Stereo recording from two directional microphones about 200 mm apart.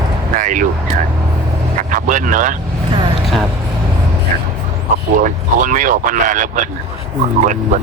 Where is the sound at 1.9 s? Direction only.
40° right (ahead or behind).